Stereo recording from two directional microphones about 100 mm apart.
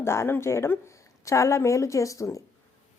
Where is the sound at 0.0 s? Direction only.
25° left (ahead or behind).